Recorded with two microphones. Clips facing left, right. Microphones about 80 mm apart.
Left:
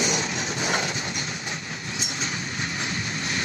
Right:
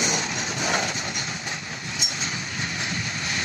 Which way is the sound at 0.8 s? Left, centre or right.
Right.